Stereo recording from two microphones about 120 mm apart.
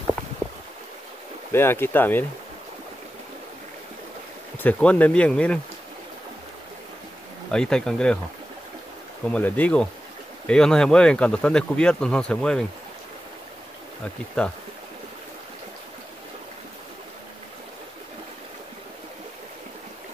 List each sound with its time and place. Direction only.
1.5 s speech: 20° left (ahead or behind)
4.6 s speech: 10° left (ahead or behind)
7.5 s speech: 5° left (ahead or behind)
9.3 s speech: 10° left (ahead or behind)
14.4 s speech: 10° left (ahead or behind)